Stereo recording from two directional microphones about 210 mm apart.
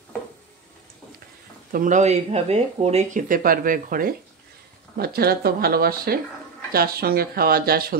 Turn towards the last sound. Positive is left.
turn(degrees=-45)  # may be behind; listen again after turning